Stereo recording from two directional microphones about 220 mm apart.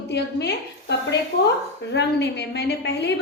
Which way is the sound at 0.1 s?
50° left (ahead or behind).